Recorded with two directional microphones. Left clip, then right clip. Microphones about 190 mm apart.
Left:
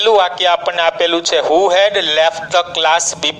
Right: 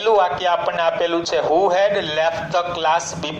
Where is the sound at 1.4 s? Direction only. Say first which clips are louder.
Left 4 dB; 20° left (ahead or behind).